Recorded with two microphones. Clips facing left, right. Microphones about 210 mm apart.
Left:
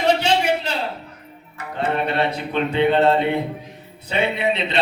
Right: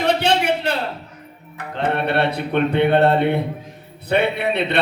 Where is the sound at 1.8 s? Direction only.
65° right (ahead or behind).